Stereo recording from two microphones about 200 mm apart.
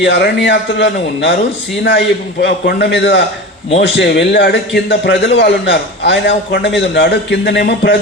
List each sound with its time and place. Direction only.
0.0 s a man's voice: 60° left (ahead or behind)
2.4 s a man's voice: 55° left (ahead or behind)